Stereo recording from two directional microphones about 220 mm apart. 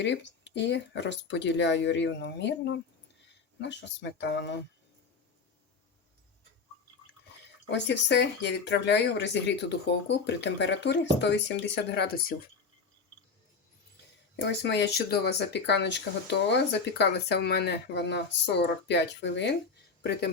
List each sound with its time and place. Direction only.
0.0 s speech: 55° left (ahead or behind)
7.7 s speech: 50° left (ahead or behind)
14.3 s speech: 50° left (ahead or behind)